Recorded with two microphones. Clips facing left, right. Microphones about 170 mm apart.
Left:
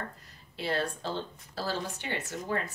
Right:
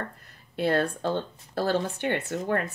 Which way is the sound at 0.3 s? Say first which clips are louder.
Right 8 dB; 55° right (ahead or behind).